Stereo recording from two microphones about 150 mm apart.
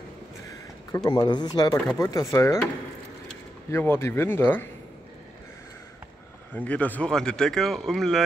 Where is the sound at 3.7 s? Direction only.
15° left (ahead or behind).